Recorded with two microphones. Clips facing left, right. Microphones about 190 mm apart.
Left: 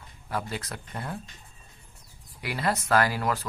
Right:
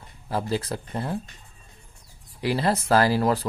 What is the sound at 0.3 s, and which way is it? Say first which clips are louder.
Speech: right 6 dB; 30° right (ahead or behind).